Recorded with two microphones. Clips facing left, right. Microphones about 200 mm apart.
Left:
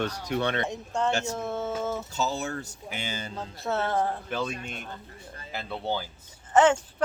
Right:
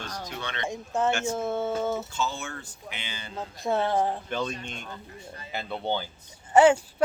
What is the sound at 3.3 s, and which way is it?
Speech, 15° right (ahead or behind).